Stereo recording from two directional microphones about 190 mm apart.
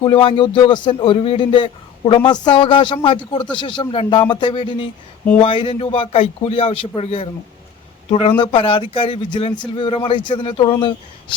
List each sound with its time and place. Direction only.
0.0 s speech: 25° left (ahead or behind)
8.4 s speech: 30° left (ahead or behind)